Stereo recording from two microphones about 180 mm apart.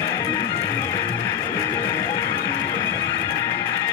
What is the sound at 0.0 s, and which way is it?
Music, 20° left (ahead or behind).